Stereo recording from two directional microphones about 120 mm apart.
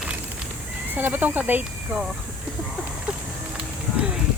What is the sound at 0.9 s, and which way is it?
Speech, 15° right (ahead or behind).